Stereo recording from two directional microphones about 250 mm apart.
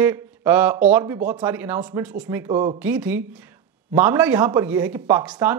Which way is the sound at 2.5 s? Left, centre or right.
Centre.